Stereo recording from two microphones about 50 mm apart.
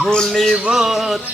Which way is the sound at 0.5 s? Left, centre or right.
Centre.